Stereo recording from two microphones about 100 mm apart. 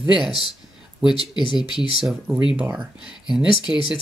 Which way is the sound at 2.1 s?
5° right (ahead or behind).